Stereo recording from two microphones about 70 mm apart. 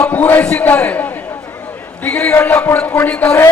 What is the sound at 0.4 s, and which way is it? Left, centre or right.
Speech, centre.